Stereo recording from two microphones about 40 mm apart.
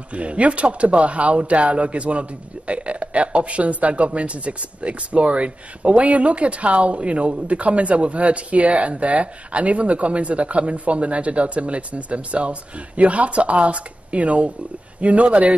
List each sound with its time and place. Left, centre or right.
0.1 s speech: right